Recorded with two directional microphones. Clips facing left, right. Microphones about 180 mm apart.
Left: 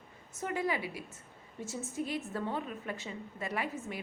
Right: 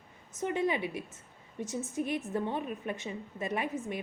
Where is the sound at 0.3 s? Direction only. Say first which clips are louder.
Right 3 dB; 20° right (ahead or behind).